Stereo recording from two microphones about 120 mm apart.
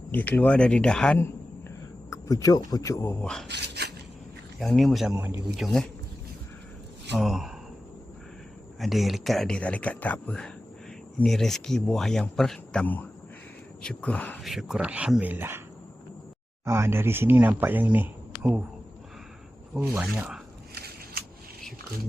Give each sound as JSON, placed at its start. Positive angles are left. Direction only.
{"t": 0.1, "sound": "speech", "side_deg": 15}
{"t": 1.2, "sound": "a sound", "side_deg": 20}
{"t": 3.2, "sound": "speech", "side_deg": 5}
{"t": 4.6, "sound": "speech", "side_deg": 5}
{"t": 5.1, "sound": "speech", "side_deg": -15}
{"t": 5.5, "sound": "speech", "side_deg": 0}
{"t": 7.2, "sound": "speech", "side_deg": 0}
{"t": 8.8, "sound": "speech", "side_deg": 0}
{"t": 14.4, "sound": "speech", "side_deg": 0}
{"t": 16.6, "sound": "speech", "side_deg": -20}
{"t": 20.0, "sound": "speech", "side_deg": -10}